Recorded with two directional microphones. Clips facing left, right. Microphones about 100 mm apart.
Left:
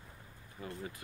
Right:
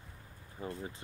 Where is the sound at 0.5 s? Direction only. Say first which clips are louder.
Right 2 dB; 30° right (ahead or behind).